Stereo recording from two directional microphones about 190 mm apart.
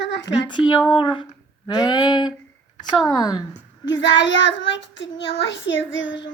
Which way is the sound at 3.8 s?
75° left (ahead or behind).